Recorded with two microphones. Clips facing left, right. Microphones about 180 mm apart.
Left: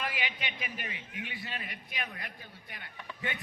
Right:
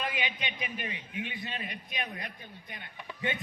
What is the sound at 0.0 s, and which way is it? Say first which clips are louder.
A man's voice: right 2 dB; 20° right (ahead or behind).